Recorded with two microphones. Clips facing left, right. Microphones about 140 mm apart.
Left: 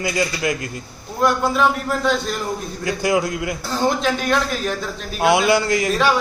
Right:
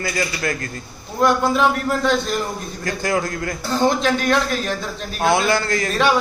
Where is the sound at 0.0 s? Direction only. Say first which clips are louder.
Left 2 dB; 15° left (ahead or behind).